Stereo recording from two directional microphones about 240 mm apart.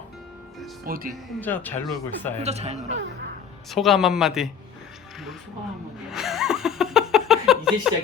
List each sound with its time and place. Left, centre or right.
0.9 s speech: right
1.4 s speech: centre
2.4 s speech: right
3.7 s a man's voice: centre
6.1 s a sound: centre